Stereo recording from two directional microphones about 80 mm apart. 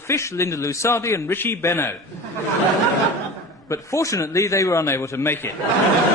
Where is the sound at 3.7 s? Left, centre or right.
Left.